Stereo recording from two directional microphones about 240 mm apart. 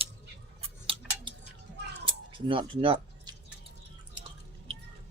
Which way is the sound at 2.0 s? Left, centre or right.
Right.